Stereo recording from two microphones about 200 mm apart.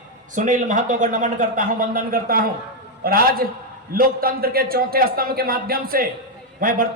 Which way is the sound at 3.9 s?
45° right (ahead or behind).